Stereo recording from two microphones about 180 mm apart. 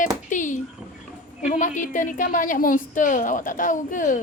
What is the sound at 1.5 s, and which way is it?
A woman's voice, 45° left (ahead or behind).